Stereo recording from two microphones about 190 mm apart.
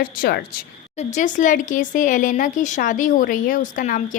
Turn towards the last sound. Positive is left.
turn(degrees=45)  # may be behind; listen again after turning